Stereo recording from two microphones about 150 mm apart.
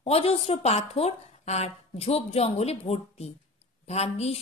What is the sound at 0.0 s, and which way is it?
A woman's voice, 45° left (ahead or behind).